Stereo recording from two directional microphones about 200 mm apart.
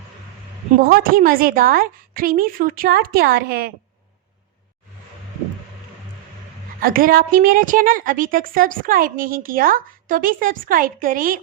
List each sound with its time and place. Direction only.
0.8 s a woman's voice: 45° right (ahead or behind)
6.7 s a woman's voice: 45° right (ahead or behind)